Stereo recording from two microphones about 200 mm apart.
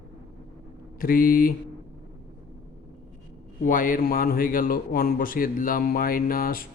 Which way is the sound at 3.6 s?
45° left (ahead or behind).